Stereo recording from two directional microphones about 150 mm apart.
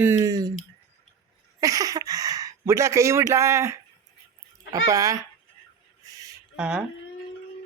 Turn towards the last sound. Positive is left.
turn(degrees=-5)  # may be behind; listen again after turning